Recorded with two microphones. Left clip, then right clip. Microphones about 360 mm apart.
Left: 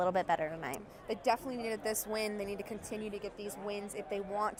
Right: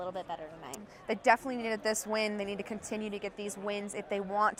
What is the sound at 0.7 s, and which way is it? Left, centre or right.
A woman's voice, right.